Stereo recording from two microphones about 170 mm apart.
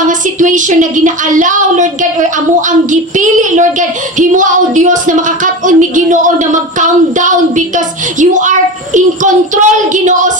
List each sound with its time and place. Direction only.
0.1 s child singing: 50° right (ahead or behind)